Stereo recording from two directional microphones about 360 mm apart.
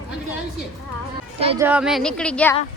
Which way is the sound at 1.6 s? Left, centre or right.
Centre.